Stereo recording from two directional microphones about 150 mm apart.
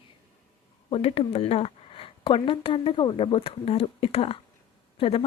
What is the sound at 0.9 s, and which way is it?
Speech, 40° left (ahead or behind).